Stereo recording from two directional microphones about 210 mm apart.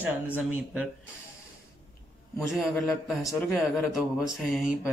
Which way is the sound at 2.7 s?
Centre (ahead or behind).